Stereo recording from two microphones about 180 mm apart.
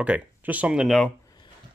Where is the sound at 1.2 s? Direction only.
25° left (ahead or behind).